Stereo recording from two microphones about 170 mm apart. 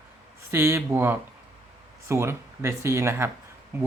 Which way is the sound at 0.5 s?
15° right (ahead or behind).